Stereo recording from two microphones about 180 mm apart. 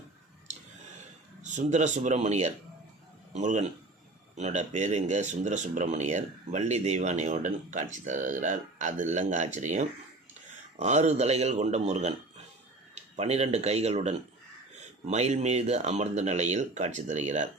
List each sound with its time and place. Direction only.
1.4 s speech: 40° right (ahead or behind)